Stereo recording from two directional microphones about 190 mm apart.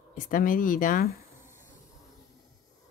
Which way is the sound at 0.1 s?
45° left (ahead or behind).